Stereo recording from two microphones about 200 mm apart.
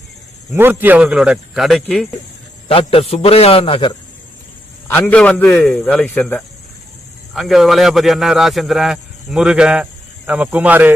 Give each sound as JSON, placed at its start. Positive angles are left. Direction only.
{"t": 0.5, "sound": "speech", "side_deg": -10}
{"t": 2.6, "sound": "a man's voice", "side_deg": 30}
{"t": 4.9, "sound": "a man's voice", "side_deg": 10}